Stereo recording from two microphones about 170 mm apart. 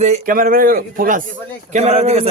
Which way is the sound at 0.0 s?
50° right (ahead or behind).